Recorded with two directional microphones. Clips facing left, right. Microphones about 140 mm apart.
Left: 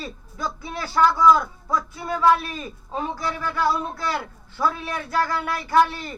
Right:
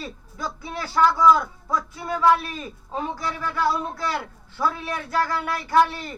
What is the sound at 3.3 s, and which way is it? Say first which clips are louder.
Speech: left 1 dB; 5° left (ahead or behind).